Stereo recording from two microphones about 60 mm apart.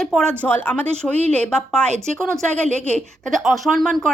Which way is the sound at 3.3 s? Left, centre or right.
Centre.